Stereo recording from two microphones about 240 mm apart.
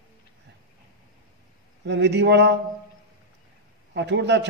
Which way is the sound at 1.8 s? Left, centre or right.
Right.